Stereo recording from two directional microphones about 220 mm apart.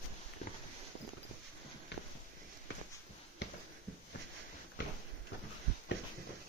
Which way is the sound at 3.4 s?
50° left (ahead or behind).